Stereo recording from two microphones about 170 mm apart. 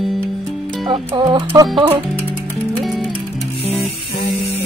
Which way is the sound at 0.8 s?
30° right (ahead or behind).